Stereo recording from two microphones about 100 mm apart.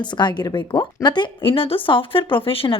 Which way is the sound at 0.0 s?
50° left (ahead or behind).